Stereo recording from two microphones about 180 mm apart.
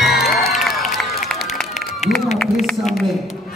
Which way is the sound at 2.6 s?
Centre (ahead or behind).